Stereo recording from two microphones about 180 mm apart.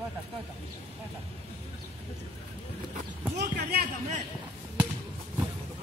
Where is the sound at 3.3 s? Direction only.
65° right (ahead or behind).